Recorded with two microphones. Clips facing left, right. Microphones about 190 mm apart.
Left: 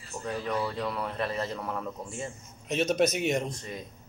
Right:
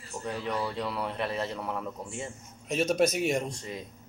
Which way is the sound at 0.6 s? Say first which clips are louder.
Even; 5° right (ahead or behind).